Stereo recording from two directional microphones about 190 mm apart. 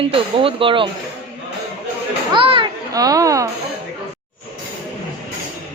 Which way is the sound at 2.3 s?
25° right (ahead or behind).